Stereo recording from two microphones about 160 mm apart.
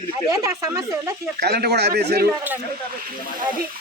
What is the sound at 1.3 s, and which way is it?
Speech, 85° right.